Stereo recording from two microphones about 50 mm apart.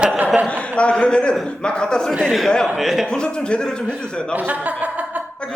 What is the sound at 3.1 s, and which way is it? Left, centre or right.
A man's voice, centre.